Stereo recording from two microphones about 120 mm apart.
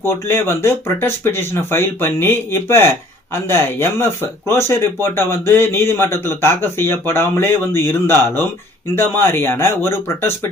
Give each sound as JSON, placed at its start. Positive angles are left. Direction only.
{"t": 0.0, "sound": "speech", "side_deg": 20}